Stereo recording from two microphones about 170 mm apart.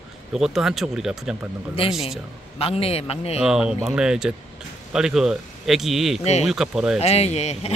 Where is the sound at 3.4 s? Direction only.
5° right (ahead or behind).